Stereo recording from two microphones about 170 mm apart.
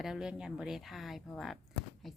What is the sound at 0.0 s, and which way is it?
A woman's voice, 5° right (ahead or behind).